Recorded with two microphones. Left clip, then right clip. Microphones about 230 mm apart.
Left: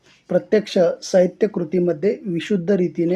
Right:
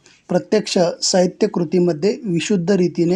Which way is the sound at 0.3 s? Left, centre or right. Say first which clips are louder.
Even; right.